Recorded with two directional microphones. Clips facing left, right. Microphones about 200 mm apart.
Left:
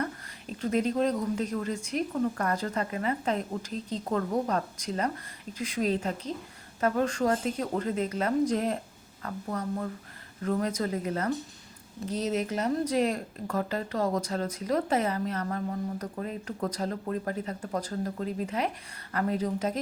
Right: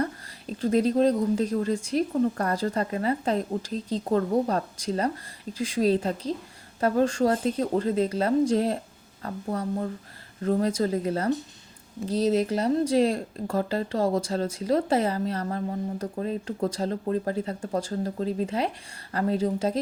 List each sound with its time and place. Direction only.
0.0 s speech: 35° right (ahead or behind)